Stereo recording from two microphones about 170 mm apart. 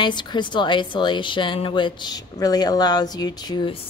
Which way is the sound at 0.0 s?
25° left (ahead or behind).